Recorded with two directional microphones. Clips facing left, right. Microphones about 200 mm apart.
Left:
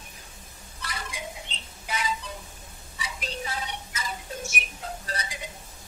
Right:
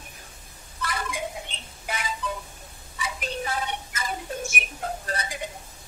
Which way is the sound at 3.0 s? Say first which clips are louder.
Right 4 dB; 55° right (ahead or behind).